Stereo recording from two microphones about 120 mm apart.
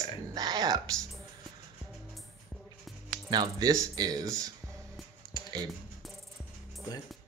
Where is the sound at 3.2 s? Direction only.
35° right (ahead or behind).